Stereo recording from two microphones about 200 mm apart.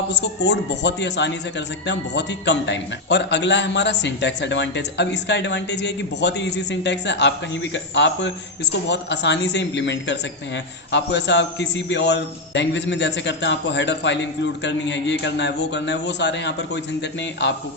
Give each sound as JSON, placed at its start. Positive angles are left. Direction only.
{"t": 0.1, "sound": "a man's voice", "side_deg": 60}